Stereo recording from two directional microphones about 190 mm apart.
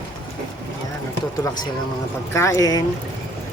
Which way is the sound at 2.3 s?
15° left (ahead or behind).